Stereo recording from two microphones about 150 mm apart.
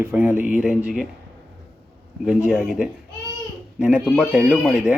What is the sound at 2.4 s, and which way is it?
Speech, 5° right (ahead or behind).